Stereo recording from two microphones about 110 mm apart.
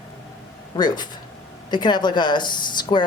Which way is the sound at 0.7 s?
40° left (ahead or behind).